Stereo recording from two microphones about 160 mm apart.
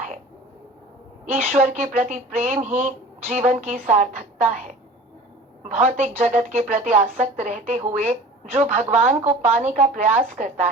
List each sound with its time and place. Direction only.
1.2 s a woman's voice: 50° right (ahead or behind)